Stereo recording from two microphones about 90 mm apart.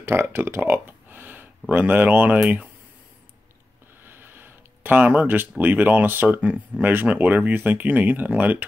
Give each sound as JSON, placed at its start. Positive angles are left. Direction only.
{"t": 0.0, "sound": "speech", "side_deg": -25}
{"t": 4.0, "sound": "a sound", "side_deg": -25}
{"t": 5.6, "sound": "speech", "side_deg": -20}